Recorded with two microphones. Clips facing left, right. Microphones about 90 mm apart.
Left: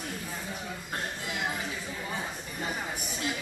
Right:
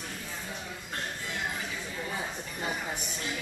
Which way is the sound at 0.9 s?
10° left (ahead or behind).